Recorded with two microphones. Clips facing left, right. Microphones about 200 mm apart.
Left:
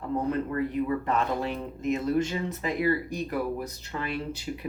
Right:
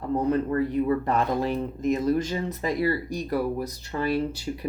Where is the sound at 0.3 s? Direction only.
35° right (ahead or behind).